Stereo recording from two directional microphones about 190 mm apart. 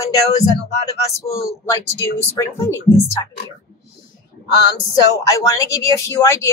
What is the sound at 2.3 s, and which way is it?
Speech, 15° left (ahead or behind).